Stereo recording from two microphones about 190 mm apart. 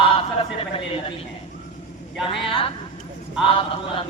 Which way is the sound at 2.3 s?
25° left (ahead or behind).